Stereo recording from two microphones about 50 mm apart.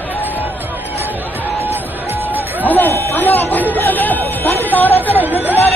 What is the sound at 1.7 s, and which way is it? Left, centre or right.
Music, right.